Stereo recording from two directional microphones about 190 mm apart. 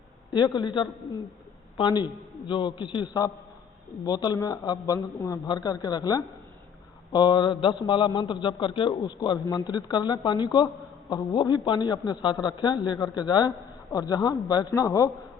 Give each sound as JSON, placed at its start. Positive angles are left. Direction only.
{"t": 0.3, "sound": "a man's voice", "side_deg": 25}